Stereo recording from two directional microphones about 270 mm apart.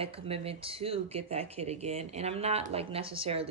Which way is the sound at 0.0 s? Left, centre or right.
Right.